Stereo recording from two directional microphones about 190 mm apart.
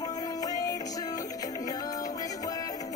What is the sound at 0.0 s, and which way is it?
Music, 20° left (ahead or behind).